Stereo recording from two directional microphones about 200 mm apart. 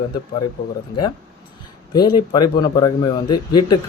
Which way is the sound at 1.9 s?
20° left (ahead or behind).